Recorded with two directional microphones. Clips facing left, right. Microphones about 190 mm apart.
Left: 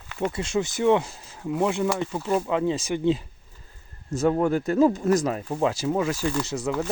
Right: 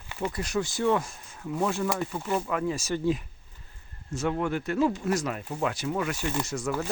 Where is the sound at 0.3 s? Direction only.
25° left (ahead or behind).